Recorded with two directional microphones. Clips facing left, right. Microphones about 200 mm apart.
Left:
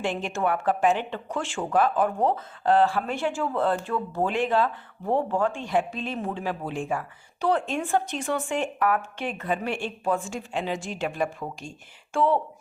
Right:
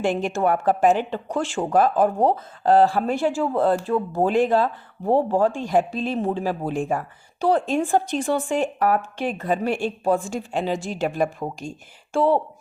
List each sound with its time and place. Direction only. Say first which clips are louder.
0.0 s speech: right 5 dB; 40° right (ahead or behind)